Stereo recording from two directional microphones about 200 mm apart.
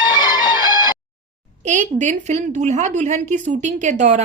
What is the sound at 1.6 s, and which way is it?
A woman's voice, 40° right (ahead or behind).